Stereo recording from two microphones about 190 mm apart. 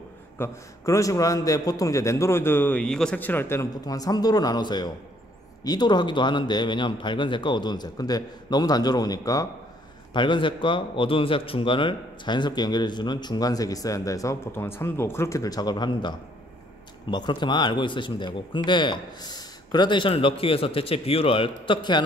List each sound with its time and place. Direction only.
0.4 s a man's voice: 15° left (ahead or behind)